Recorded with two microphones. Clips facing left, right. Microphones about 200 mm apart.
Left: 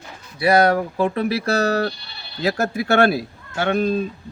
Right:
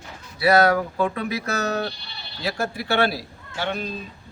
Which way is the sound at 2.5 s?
45° left (ahead or behind).